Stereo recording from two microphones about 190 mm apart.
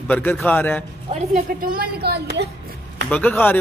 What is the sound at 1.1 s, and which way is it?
Speech, 35° right (ahead or behind).